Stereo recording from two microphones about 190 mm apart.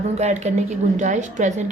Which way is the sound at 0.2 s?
35° right (ahead or behind).